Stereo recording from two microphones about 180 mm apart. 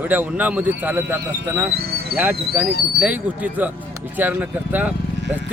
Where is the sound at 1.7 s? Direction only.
55° right (ahead or behind).